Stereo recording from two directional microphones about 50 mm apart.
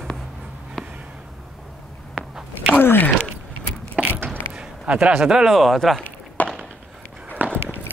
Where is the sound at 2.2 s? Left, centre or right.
Centre.